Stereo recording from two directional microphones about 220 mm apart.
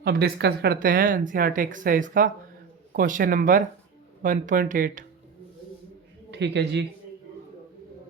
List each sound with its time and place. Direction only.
0.0 s speech: 45° right (ahead or behind)
6.3 s a man's voice: 50° right (ahead or behind)